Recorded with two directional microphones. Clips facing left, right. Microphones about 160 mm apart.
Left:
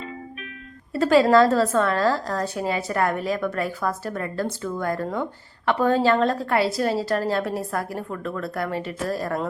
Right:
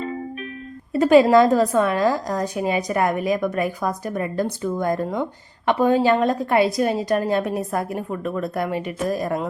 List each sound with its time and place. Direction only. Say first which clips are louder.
0.9 s a woman's voice: right 3 dB; 20° right (ahead or behind)